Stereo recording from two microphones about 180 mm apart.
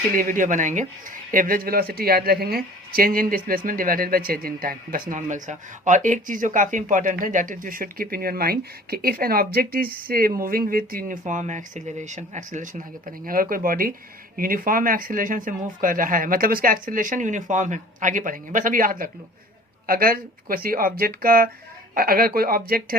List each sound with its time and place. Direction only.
0.2 s speech: 45° right (ahead or behind)